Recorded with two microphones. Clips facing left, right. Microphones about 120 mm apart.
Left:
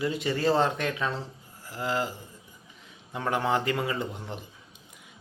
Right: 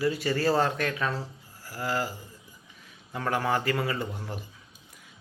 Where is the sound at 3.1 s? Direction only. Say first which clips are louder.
Left 1 dB; 20° left (ahead or behind).